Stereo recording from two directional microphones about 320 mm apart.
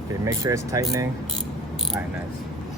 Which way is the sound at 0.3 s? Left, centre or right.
Centre.